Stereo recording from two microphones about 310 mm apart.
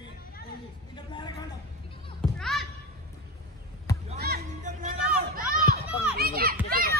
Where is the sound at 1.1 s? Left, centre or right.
Centre.